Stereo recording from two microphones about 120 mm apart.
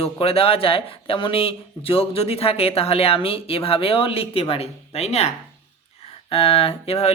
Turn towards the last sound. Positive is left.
turn(degrees=55)  # may be behind; listen again after turning